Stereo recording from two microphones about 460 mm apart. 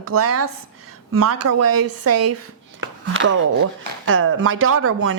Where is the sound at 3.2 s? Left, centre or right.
Right.